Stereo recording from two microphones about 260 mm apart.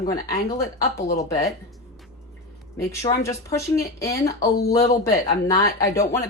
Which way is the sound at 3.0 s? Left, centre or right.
Centre.